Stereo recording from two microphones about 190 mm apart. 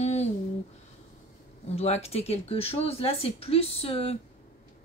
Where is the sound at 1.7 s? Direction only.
35° left (ahead or behind).